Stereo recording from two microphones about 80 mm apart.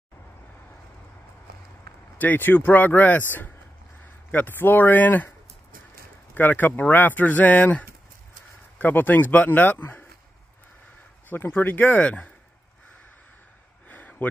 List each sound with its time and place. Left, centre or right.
2.1 s speech: left
6.3 s speech: left
11.2 s speech: left
13.8 s a sound: centre